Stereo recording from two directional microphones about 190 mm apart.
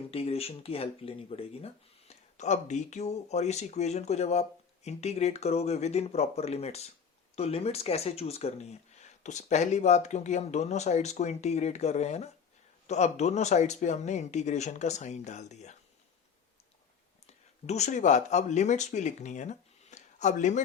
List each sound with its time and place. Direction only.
0.1 s speech: 30° left (ahead or behind)
17.2 s speech: 35° left (ahead or behind)